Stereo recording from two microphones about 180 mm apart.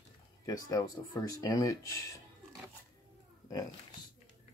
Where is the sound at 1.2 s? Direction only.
20° left (ahead or behind).